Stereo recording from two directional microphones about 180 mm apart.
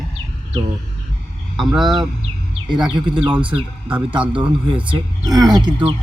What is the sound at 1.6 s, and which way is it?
Speech, centre (ahead or behind).